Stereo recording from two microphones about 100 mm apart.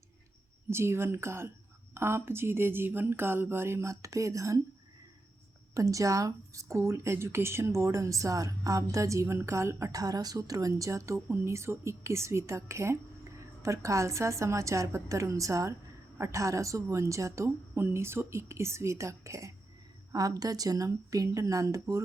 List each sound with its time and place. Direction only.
0.7 s a woman's voice: 25° right (ahead or behind)
5.7 s a woman's voice: 35° right (ahead or behind)